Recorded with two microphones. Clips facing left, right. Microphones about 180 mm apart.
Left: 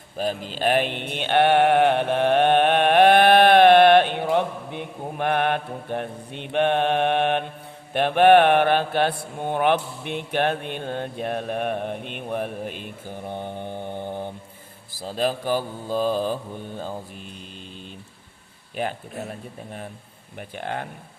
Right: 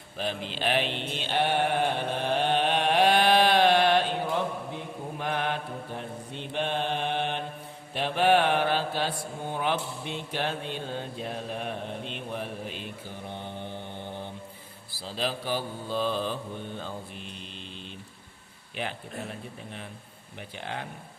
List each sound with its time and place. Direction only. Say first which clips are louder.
0.2 s mantra: left 6 dB; 40° left (ahead or behind)
18.8 s mantra: left 6 dB; 45° left (ahead or behind)